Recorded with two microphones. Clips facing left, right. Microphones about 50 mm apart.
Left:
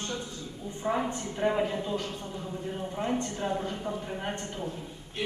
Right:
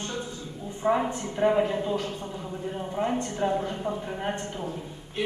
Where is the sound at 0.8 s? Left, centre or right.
Right.